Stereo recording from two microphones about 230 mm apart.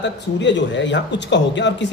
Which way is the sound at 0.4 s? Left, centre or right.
Left.